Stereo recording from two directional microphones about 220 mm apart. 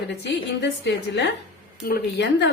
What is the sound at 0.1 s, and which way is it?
Speech, 50° left (ahead or behind).